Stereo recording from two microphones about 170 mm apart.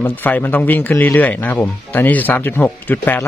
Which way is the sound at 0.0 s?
10° left (ahead or behind).